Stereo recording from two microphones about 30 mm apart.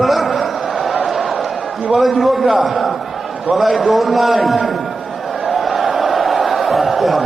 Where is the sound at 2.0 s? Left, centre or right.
Centre.